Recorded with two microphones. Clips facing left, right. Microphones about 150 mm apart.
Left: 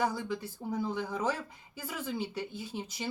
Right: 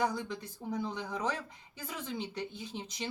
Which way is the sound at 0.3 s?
10° left (ahead or behind).